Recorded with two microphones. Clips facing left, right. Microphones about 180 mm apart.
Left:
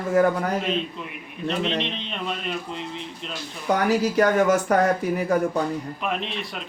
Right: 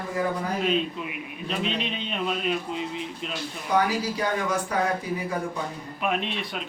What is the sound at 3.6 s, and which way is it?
Speech, 70° left (ahead or behind).